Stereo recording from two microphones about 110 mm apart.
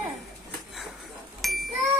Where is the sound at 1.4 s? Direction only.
Centre (ahead or behind).